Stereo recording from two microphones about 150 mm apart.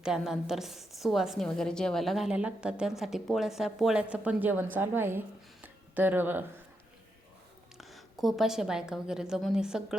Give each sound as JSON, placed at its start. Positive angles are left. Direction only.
{"t": 0.0, "sound": "a woman's voice", "side_deg": -5}
{"t": 5.6, "sound": "a sound", "side_deg": -10}
{"t": 7.8, "sound": "a woman's voice", "side_deg": 0}